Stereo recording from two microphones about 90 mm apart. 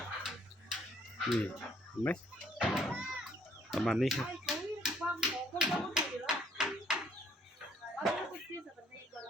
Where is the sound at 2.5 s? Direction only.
5° right (ahead or behind).